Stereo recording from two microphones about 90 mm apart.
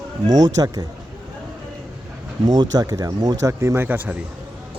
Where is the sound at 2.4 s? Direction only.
50° right (ahead or behind).